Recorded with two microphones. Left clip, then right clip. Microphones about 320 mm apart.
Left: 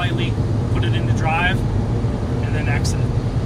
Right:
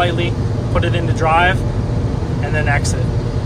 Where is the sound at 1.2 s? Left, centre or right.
Centre.